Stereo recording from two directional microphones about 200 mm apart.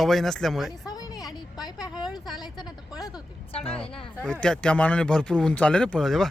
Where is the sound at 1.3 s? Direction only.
20° left (ahead or behind).